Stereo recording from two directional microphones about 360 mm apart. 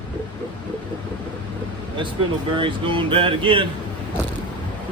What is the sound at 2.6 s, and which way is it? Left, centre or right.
Speech, centre.